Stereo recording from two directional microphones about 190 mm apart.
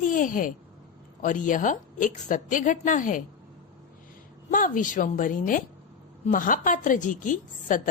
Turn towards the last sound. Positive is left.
turn(degrees=45)  # may be behind; listen again after turning